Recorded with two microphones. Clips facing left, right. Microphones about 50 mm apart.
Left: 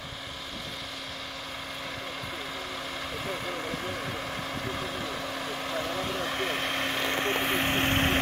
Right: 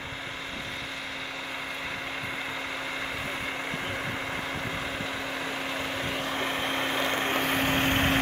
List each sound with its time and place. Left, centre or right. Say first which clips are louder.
5.4 s vehicle: even; right
6.2 s vehicle: even; centre